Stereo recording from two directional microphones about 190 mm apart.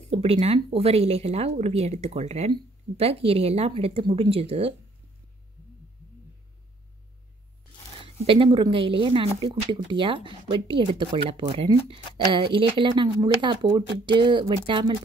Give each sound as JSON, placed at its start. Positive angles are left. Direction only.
{"t": 0.1, "sound": "speech", "side_deg": -30}
{"t": 8.0, "sound": "speech", "side_deg": -25}